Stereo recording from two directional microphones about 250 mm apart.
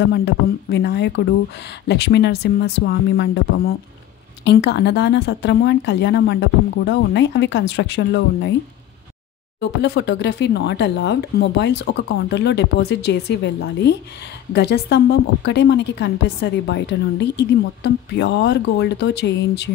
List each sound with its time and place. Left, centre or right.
0.1 s a woman's voice: left
9.6 s a woman's voice: left